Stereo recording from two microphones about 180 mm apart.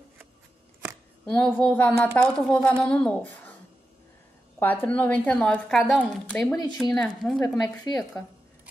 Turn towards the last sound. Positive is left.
turn(degrees=20)  # may be behind; listen again after turning